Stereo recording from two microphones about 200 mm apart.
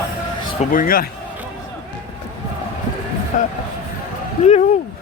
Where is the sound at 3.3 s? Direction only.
40° left (ahead or behind).